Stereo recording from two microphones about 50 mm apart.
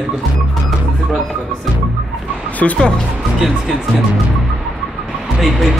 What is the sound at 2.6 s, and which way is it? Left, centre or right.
Speech, centre.